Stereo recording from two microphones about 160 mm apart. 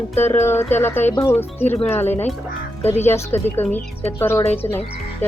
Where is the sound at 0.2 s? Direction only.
15° left (ahead or behind).